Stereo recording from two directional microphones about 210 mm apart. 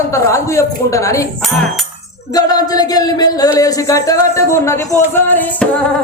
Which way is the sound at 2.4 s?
20° left (ahead or behind).